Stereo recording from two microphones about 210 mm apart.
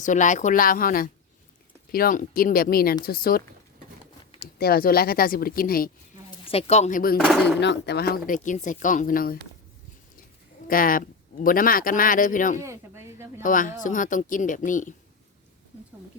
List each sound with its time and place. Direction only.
0.0 s speech: 35° left (ahead or behind)
6.4 s speech: 30° left (ahead or behind)
7.2 s speech: centre (ahead or behind)
7.4 s speech: 55° left (ahead or behind)
8.3 s speech: 35° left (ahead or behind)
10.7 s speech: 40° left (ahead or behind)
12.6 s speech: 10° right (ahead or behind)
13.4 s speech: 40° left (ahead or behind)